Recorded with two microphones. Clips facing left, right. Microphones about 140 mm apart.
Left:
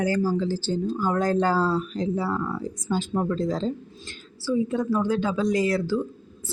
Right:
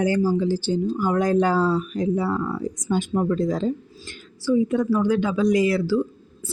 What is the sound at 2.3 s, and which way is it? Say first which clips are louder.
Speech: right 3 dB; centre (ahead or behind).